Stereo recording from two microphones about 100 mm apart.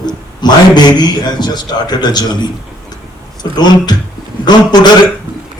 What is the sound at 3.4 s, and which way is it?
Speech, 45° left (ahead or behind).